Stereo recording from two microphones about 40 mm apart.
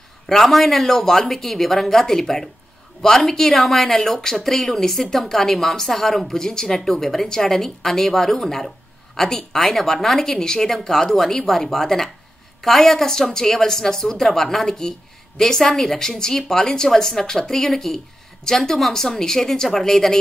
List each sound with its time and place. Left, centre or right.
0.3 s a woman's voice: centre